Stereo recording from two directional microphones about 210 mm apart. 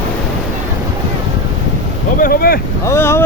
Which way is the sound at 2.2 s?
45° left (ahead or behind).